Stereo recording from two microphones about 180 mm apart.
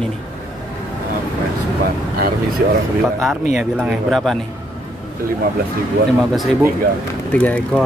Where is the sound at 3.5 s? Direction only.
Centre (ahead or behind).